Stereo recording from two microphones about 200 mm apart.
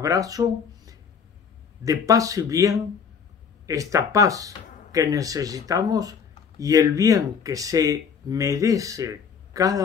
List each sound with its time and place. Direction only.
0.0 s speech: 15° right (ahead or behind)